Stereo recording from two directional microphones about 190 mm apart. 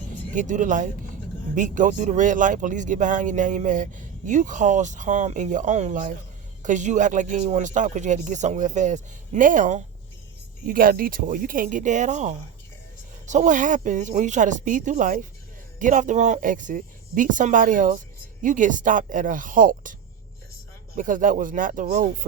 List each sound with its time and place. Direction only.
0.3 s speech: 40° right (ahead or behind)